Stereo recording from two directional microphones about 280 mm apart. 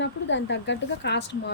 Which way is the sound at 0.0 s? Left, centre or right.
Left.